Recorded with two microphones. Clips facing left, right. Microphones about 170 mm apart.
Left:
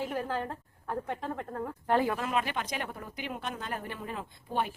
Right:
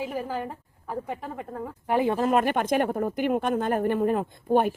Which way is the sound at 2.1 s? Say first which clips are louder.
Right 9 dB; 45° right (ahead or behind).